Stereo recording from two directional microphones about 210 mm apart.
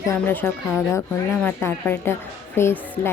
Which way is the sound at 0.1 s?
10° left (ahead or behind).